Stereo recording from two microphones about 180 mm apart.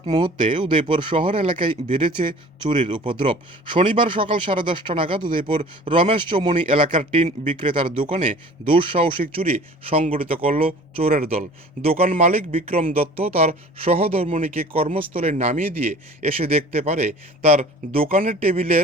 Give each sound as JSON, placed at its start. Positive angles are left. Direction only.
{"t": 0.0, "sound": "speech", "side_deg": -25}